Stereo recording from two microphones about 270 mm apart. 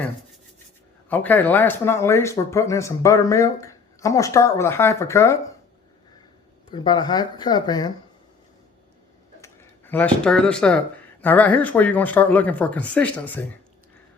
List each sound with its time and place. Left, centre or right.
1.1 s speech: centre
6.7 s speech: centre
9.4 s speech: centre